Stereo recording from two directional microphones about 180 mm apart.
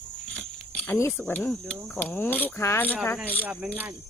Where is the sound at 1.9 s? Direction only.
10° left (ahead or behind).